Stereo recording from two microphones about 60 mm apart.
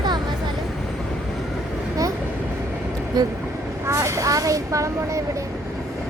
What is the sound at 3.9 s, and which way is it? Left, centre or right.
Speech, right.